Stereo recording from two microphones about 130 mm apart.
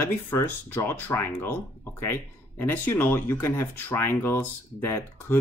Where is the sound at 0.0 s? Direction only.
20° left (ahead or behind).